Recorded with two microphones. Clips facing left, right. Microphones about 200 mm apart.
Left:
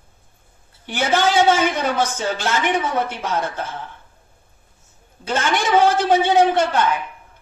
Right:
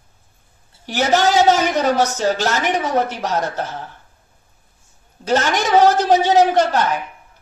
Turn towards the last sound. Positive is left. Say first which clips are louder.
# right 1 dB
turn(degrees=-40)  # may be behind; listen again after turning